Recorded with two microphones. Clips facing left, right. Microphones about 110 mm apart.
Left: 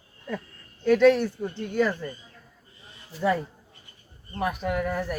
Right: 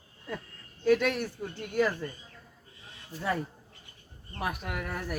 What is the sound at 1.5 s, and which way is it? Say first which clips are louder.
Speech: left 2 dB; 5° right (ahead or behind).